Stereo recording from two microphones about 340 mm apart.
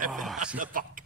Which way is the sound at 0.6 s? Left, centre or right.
Right.